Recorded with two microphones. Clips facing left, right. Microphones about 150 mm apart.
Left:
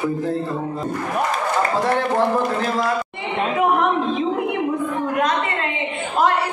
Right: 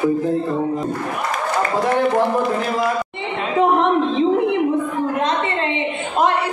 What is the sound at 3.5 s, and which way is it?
A woman's voice, 30° right (ahead or behind).